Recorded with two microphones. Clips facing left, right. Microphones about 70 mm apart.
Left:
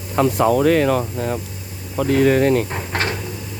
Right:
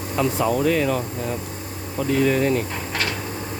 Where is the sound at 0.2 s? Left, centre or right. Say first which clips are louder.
Left 5 dB; left.